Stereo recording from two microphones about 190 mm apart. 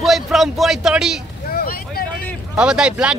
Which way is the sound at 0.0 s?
Centre (ahead or behind).